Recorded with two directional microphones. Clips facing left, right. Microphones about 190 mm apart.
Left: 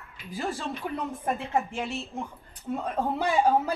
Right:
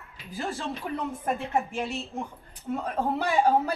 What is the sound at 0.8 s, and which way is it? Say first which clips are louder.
A woman's voice: even; centre (ahead or behind).